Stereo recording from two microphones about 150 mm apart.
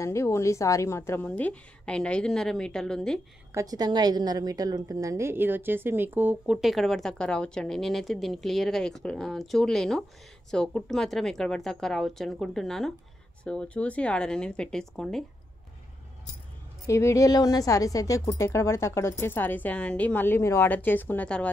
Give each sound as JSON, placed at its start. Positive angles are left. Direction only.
{"t": 0.0, "sound": "a woman's voice", "side_deg": 20}
{"t": 3.5, "sound": "a woman's voice", "side_deg": -25}
{"t": 16.8, "sound": "a woman's voice", "side_deg": 20}